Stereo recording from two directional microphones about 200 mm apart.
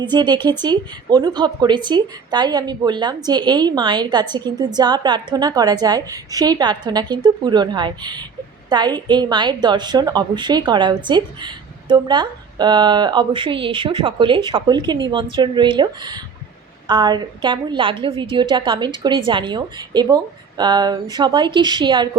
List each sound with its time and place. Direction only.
0.1 s a woman's voice: 20° right (ahead or behind)